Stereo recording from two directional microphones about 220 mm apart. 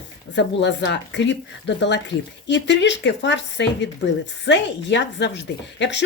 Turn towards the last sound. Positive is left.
turn(degrees=55)  # may be behind; listen again after turning